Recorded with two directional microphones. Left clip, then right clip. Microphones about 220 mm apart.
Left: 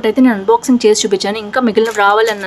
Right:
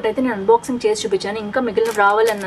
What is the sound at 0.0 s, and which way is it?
A woman's voice, 50° left (ahead or behind).